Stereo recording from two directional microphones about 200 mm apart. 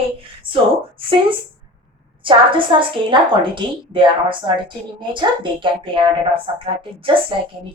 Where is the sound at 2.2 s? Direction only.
25° right (ahead or behind).